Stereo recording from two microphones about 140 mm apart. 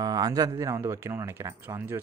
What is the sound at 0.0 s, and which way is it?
Speech, 25° right (ahead or behind).